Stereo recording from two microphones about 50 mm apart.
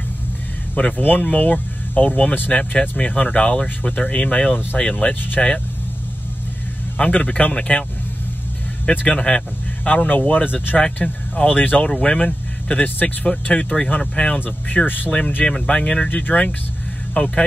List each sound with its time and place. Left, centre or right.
0.7 s speech: left
7.0 s speech: left
9.0 s speech: centre
9.8 s speech: left
11.8 s speech: centre
16.1 s speech: left